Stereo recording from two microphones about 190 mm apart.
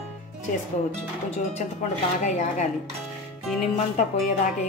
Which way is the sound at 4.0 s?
40° left (ahead or behind).